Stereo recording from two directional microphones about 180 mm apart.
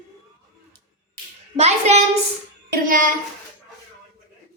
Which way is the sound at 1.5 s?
40° right (ahead or behind).